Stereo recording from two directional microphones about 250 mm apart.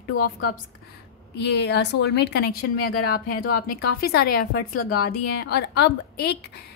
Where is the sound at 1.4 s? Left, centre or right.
Left.